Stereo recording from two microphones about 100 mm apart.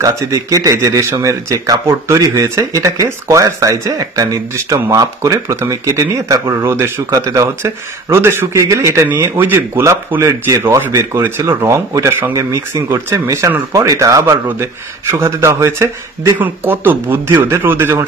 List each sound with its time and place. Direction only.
0.0 s speech: 35° right (ahead or behind)